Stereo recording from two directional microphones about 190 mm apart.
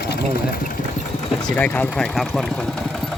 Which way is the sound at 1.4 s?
5° left (ahead or behind).